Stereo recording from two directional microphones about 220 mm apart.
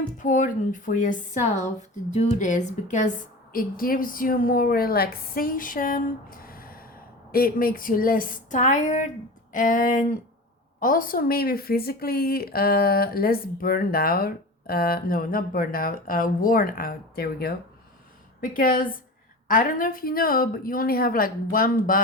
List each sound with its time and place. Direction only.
0.2 s a woman's voice: 35° left (ahead or behind)